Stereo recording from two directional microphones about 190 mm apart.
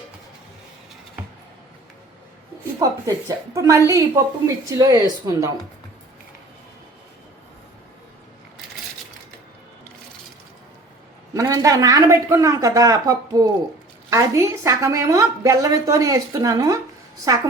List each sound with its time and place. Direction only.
2.7 s a woman's voice: 15° right (ahead or behind)
11.3 s a woman's voice: 15° right (ahead or behind)